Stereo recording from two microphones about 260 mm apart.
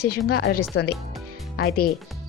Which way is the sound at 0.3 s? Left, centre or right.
Left.